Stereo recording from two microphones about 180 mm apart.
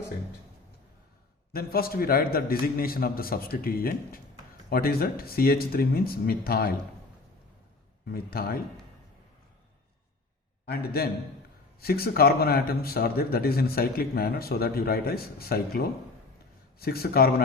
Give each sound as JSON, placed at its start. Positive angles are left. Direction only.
{"t": 1.5, "sound": "a man's voice", "side_deg": 55}
{"t": 8.1, "sound": "a man's voice", "side_deg": 55}
{"t": 10.7, "sound": "a man's voice", "side_deg": 60}